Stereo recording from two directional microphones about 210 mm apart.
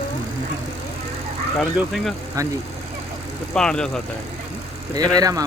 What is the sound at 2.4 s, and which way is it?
Speech, 15° right (ahead or behind).